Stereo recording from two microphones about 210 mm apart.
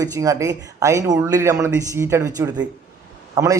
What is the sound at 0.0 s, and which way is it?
A man's voice, 15° right (ahead or behind).